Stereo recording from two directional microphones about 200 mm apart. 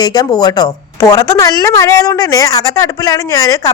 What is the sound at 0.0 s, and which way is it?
A woman's voice, 20° left (ahead or behind).